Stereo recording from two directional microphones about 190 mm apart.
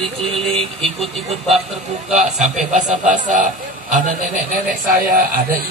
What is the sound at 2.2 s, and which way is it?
Speech, 40° right (ahead or behind).